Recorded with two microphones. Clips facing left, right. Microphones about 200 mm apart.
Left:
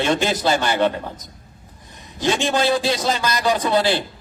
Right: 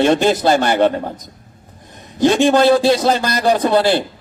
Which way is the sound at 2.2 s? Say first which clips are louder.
Right 8 dB; 55° right (ahead or behind).